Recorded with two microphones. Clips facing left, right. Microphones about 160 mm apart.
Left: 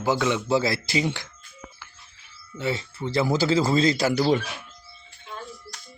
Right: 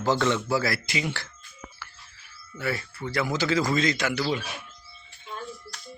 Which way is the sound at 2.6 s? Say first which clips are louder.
Left 3 dB; 20° left (ahead or behind).